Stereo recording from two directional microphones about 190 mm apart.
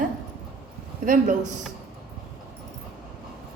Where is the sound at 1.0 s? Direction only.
45° right (ahead or behind).